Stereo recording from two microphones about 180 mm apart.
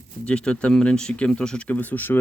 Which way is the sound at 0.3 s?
5° left (ahead or behind).